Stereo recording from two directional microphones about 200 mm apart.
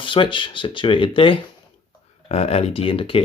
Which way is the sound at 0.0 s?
25° left (ahead or behind).